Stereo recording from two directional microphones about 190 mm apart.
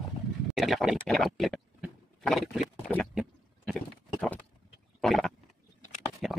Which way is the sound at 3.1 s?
5° right (ahead or behind).